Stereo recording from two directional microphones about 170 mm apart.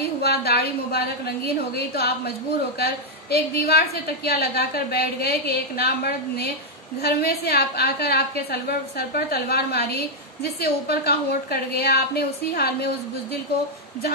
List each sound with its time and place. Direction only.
0.0 s a woman's voice: 70° left (ahead or behind)